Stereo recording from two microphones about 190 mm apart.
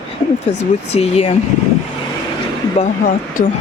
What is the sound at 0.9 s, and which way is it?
Speech, 30° left (ahead or behind).